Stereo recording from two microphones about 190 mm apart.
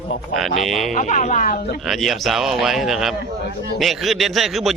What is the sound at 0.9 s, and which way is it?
Speech, 40° left (ahead or behind).